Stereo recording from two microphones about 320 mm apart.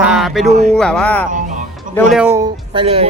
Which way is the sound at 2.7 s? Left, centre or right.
Centre.